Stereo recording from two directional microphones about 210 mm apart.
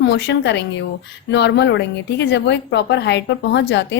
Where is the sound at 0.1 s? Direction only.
55° left (ahead or behind).